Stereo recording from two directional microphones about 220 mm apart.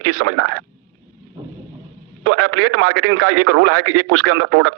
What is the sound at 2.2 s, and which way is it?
Speech, 85° right.